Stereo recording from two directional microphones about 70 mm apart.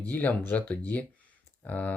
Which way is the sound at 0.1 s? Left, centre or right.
Left.